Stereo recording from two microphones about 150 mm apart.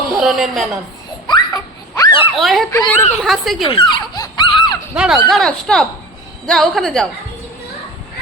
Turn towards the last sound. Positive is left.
turn(degrees=0)  # may be behind; listen again after turning